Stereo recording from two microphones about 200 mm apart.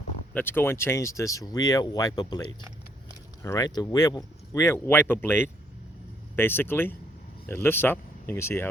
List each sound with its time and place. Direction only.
0.3 s speech: 10° left (ahead or behind)
3.4 s speech: 15° left (ahead or behind)